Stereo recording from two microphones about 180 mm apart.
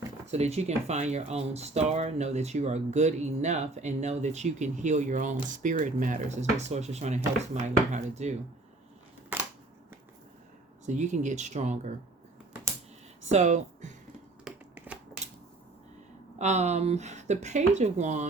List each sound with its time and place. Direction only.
0.3 s speech: 35° right (ahead or behind)
9.3 s scissors: 10° right (ahead or behind)
10.8 s speech: 40° right (ahead or behind)
13.3 s speech: 40° right (ahead or behind)
14.4 s typewriter: 5° right (ahead or behind)
16.4 s speech: 40° right (ahead or behind)